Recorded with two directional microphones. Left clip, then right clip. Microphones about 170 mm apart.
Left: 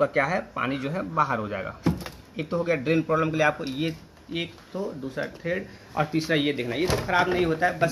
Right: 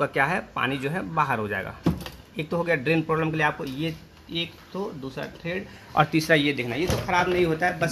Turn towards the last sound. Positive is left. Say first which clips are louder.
# even
turn(degrees=-45)  # may be behind; listen again after turning